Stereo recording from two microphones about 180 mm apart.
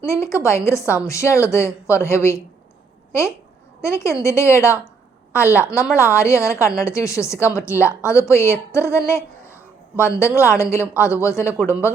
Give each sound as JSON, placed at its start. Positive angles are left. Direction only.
{"t": 0.0, "sound": "speech", "side_deg": 15}